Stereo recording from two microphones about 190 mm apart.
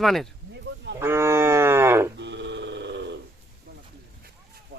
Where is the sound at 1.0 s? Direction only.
15° right (ahead or behind).